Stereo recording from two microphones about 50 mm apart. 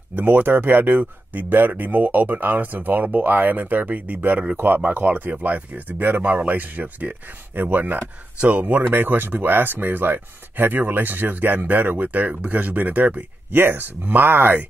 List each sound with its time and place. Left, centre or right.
0.1 s speech: right